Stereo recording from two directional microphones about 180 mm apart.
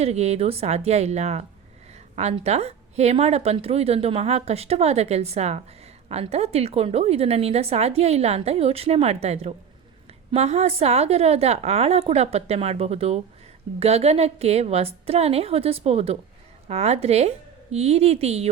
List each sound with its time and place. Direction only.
0.0 s a woman's voice: 35° right (ahead or behind)